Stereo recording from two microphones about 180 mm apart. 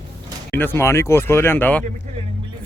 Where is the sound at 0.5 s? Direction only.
10° left (ahead or behind).